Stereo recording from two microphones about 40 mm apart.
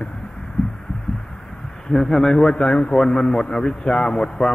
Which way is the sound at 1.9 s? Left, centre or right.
Centre.